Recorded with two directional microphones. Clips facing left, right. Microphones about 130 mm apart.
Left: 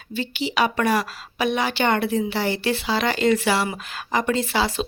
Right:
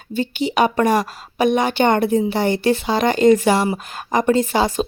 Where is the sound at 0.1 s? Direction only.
45° right (ahead or behind).